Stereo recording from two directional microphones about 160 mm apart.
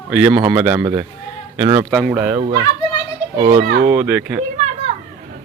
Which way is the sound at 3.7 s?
75° right (ahead or behind).